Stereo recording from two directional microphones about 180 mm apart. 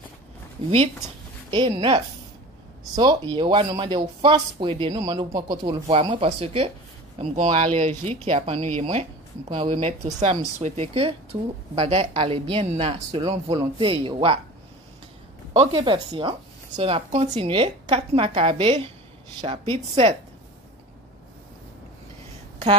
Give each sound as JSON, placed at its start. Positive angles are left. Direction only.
{"t": 1.5, "sound": "speech", "side_deg": -25}
{"t": 15.6, "sound": "speech", "side_deg": -25}